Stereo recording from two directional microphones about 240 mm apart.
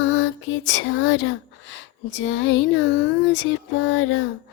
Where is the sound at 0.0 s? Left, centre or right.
Left.